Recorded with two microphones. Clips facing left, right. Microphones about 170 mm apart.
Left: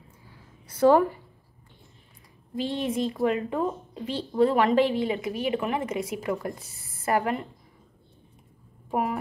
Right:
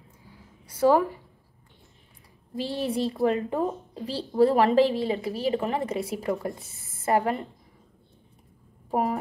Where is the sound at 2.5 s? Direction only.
35° right (ahead or behind).